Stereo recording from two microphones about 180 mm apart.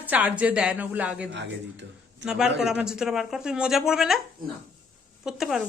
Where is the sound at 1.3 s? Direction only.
85° right.